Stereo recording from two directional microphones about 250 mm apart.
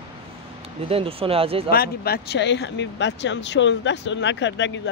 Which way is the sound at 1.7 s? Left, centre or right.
Left.